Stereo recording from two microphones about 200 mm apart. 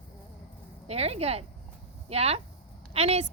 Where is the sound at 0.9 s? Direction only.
30° right (ahead or behind).